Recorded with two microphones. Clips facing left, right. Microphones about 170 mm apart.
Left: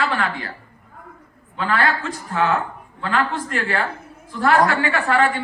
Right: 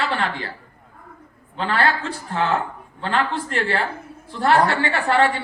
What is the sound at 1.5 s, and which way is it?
A woman's voice, 30° right (ahead or behind).